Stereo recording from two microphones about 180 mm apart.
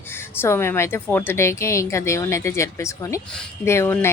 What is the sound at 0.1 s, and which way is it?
A woman's voice, 15° left (ahead or behind).